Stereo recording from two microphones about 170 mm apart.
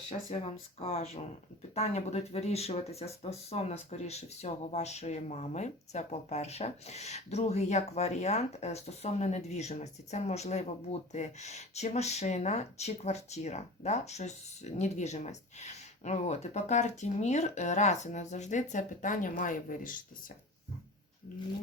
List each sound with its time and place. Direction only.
0.1 s speech: 35° left (ahead or behind); by 20.0 s 50° left (ahead or behind)